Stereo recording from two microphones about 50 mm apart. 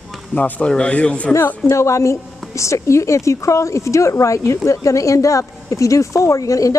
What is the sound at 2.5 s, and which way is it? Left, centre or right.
Speech, left.